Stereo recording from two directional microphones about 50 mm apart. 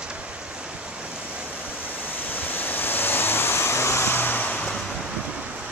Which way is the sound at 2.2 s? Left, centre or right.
Left.